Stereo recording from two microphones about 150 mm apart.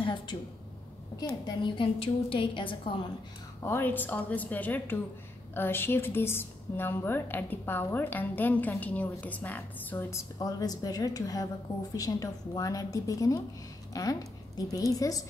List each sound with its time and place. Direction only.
0.0 s a sound: 35° left (ahead or behind)
1.1 s a woman's voice: 25° left (ahead or behind)
3.6 s a woman's voice: 15° left (ahead or behind)